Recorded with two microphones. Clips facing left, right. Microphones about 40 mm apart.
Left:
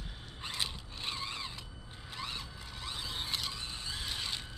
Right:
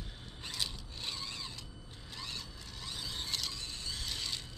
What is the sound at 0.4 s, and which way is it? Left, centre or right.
Mechanisms, left.